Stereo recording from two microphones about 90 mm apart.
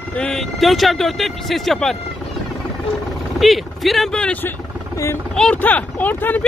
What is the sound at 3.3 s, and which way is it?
Speech, centre (ahead or behind).